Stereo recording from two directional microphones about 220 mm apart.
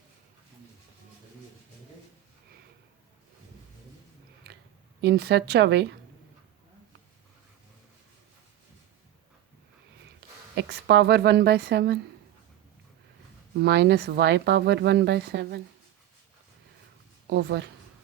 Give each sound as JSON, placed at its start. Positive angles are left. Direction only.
{"t": 4.9, "sound": "speech", "side_deg": -45}
{"t": 10.5, "sound": "speech", "side_deg": -50}
{"t": 13.6, "sound": "speech", "side_deg": -50}
{"t": 17.2, "sound": "speech", "side_deg": -50}